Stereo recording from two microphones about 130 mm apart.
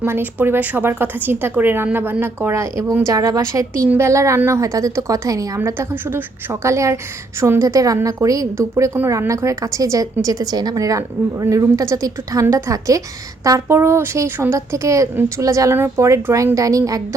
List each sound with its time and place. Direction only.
0.0 s a woman's voice: 15° right (ahead or behind)